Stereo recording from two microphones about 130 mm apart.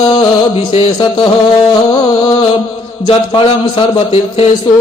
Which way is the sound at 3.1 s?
40° left (ahead or behind).